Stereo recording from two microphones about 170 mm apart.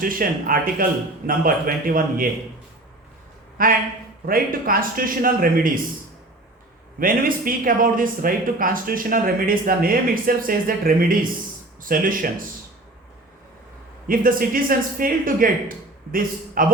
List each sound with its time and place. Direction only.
0.0 s speech: 55° right (ahead or behind)
3.6 s speech: 55° right (ahead or behind)
7.0 s speech: 55° right (ahead or behind)
14.1 s speech: 55° right (ahead or behind)
16.6 s speech: 55° right (ahead or behind)